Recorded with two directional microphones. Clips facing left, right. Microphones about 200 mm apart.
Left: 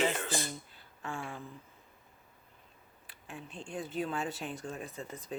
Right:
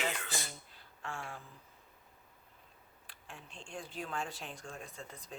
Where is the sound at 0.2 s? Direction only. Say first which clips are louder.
Left 7 dB; 35° left (ahead or behind).